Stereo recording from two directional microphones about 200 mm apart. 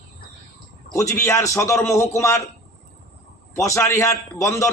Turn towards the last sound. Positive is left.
turn(degrees=15)  # may be behind; listen again after turning